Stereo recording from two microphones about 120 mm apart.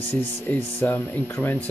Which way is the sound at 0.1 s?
15° left (ahead or behind).